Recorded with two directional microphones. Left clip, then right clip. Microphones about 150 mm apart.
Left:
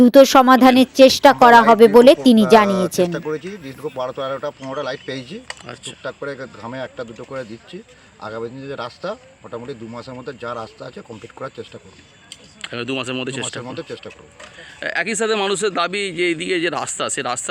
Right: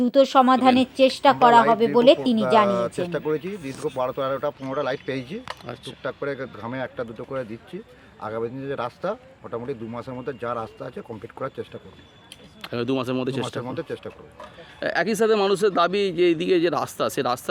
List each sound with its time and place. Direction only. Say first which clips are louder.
0.0 s speech: left 7 dB; 45° left (ahead or behind)
2.6 s a man's voice: left 5 dB; 5° right (ahead or behind)
12.6 s a man's voice: left 1 dB; 5° right (ahead or behind)